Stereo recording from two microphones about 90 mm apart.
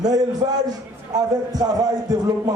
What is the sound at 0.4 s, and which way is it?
Speech, 65° right (ahead or behind).